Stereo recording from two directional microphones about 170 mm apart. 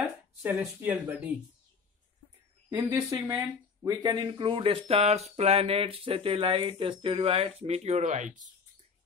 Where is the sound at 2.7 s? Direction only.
10° right (ahead or behind); by 8.5 s 45° right (ahead or behind).